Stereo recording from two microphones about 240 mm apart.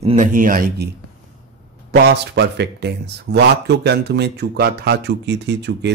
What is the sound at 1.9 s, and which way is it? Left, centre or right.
Speech, right.